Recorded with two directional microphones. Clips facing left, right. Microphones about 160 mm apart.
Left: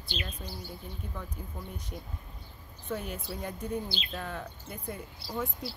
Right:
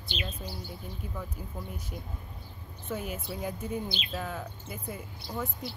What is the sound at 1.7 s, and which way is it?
Speech, 5° right (ahead or behind).